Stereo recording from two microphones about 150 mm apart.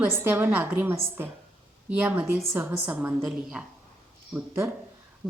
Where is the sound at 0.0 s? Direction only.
15° right (ahead or behind).